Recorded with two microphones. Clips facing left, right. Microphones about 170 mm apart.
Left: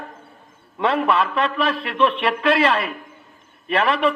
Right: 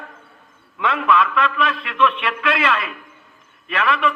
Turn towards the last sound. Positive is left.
turn(degrees=30)  # may be behind; listen again after turning